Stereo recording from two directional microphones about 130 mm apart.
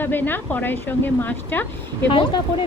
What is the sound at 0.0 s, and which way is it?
Speech, 15° left (ahead or behind).